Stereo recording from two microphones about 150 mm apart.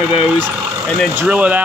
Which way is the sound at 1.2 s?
10° right (ahead or behind).